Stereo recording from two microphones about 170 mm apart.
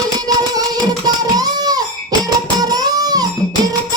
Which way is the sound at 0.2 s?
20° right (ahead or behind).